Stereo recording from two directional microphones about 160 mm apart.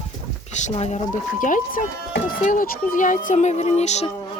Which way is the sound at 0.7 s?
45° left (ahead or behind).